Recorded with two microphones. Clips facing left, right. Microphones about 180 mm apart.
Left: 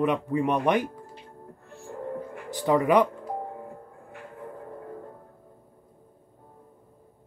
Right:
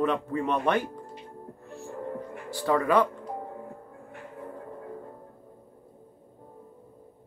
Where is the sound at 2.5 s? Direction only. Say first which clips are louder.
Left 3 dB; 15° left (ahead or behind).